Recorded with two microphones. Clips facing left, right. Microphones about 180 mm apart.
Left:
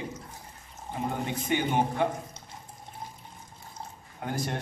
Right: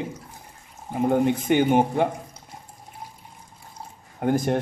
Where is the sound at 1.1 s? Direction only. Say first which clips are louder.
Right 11 dB; 55° right (ahead or behind).